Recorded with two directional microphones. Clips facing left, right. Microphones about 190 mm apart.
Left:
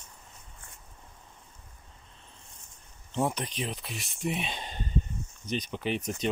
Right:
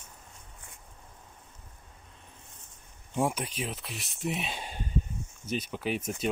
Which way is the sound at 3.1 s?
10° right (ahead or behind).